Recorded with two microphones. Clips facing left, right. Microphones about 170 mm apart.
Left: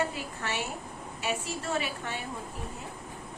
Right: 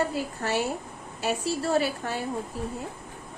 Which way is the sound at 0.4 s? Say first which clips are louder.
Right 6 dB; 40° right (ahead or behind).